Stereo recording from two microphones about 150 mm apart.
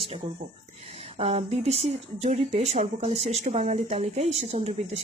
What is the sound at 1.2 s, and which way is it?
Speech, 45° right (ahead or behind).